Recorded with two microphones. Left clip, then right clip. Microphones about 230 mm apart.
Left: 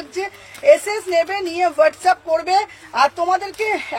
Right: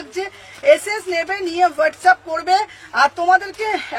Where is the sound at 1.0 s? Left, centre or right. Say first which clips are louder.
Left 5 dB; centre.